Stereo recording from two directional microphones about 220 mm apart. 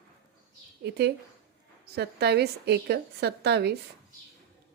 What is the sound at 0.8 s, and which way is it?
A woman's voice, 50° right (ahead or behind).